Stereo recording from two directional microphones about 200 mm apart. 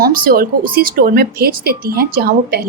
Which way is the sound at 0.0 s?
45° right (ahead or behind).